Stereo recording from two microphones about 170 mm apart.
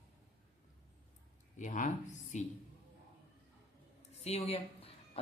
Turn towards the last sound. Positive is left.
turn(degrees=35)  # may be behind; listen again after turning